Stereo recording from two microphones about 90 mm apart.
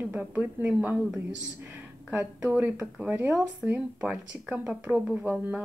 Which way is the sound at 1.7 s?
15° right (ahead or behind).